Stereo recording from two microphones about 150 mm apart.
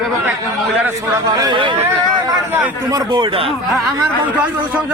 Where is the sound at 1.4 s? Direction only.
30° right (ahead or behind).